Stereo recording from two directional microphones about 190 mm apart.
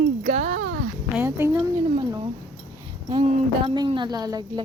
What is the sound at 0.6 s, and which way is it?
Speech, 55° right (ahead or behind).